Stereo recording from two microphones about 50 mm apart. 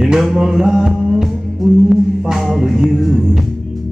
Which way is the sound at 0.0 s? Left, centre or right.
Centre.